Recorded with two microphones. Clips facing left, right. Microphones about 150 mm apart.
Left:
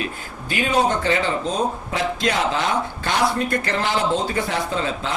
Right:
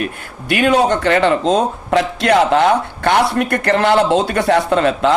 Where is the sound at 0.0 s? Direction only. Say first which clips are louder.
Right 5 dB; 75° right (ahead or behind).